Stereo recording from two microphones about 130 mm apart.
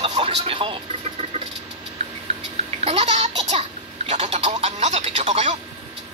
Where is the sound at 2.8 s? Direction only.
55° right (ahead or behind).